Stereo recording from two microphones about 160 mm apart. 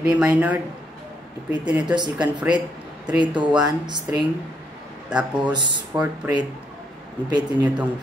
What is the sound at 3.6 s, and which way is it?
Speech, 25° right (ahead or behind).